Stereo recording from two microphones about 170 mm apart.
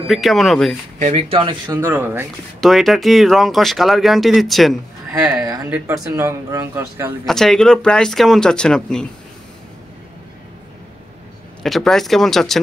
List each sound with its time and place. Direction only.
0.1 s speech: centre (ahead or behind)
0.9 s speech: 40° right (ahead or behind)
1.8 s speech: 15° right (ahead or behind)
2.6 s speech: centre (ahead or behind)
5.3 s speech: 20° right (ahead or behind)
7.2 s speech: centre (ahead or behind)
11.6 s speech: centre (ahead or behind)